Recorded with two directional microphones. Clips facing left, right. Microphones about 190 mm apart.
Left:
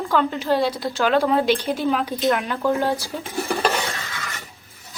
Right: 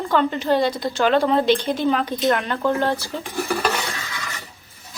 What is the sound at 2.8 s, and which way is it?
Speech, 15° left (ahead or behind).